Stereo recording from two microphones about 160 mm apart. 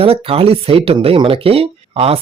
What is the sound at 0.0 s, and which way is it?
Speech, 35° right (ahead or behind).